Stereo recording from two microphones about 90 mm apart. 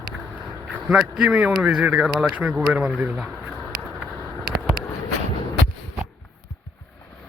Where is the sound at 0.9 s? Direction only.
10° right (ahead or behind).